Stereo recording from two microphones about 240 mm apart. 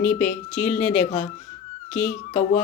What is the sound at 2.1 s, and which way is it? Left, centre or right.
Speech, left.